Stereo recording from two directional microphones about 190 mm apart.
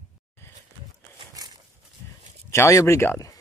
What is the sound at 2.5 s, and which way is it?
Speech, 15° left (ahead or behind).